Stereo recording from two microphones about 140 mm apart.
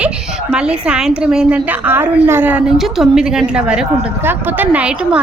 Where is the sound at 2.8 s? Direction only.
Centre (ahead or behind).